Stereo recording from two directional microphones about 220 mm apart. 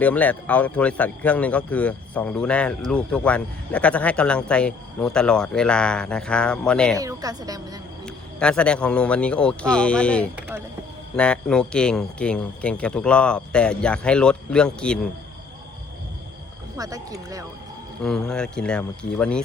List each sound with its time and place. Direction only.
0.0 s a man's voice: 5° left (ahead or behind)
7.0 s a woman's voice: 15° right (ahead or behind)
8.0 s a man's voice: 5° left (ahead or behind)
16.7 s a woman's voice: 15° right (ahead or behind)
18.0 s a man's voice: 5° left (ahead or behind)